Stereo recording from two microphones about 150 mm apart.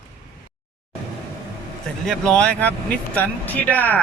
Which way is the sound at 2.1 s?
5° left (ahead or behind).